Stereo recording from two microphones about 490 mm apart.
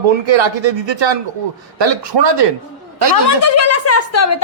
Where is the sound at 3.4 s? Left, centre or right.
Left.